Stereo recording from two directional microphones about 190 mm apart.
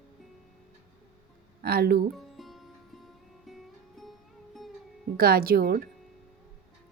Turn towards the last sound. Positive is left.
turn(degrees=-50)  # may be behind; listen again after turning